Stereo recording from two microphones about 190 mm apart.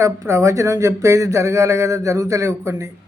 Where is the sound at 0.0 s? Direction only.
15° right (ahead or behind).